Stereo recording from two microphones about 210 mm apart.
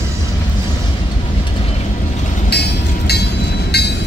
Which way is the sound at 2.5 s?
50° left (ahead or behind).